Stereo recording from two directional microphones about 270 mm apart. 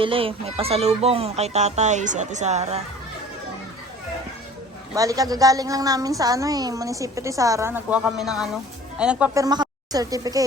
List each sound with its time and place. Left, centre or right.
0.0 s speech: centre
4.9 s a woman's voice: centre